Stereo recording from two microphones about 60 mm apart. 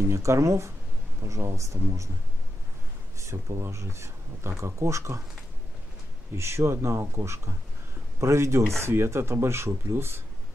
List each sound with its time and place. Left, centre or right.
0.1 s speech: right
3.2 s speech: right
6.3 s speech: right